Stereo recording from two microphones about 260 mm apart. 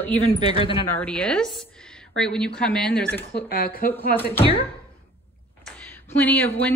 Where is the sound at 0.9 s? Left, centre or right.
Centre.